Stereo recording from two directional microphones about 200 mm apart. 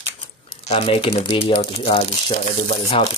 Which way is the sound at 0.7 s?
30° left (ahead or behind).